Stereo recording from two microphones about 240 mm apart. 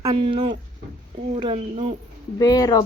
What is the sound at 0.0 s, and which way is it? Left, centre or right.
Speech, right.